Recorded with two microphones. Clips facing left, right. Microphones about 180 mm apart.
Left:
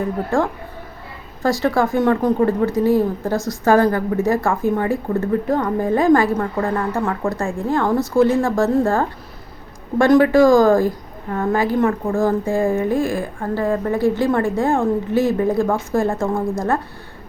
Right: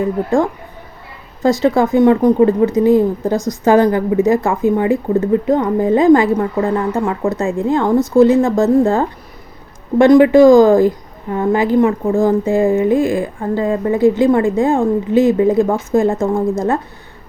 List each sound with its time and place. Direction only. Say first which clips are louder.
0.3 s a woman's voice: right 4 dB; 15° right (ahead or behind)